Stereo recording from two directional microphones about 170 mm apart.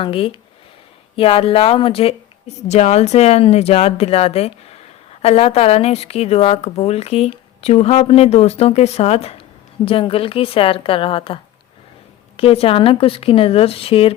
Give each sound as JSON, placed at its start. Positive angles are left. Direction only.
{"t": 0.0, "sound": "speech", "side_deg": 30}
{"t": 12.4, "sound": "speech", "side_deg": 35}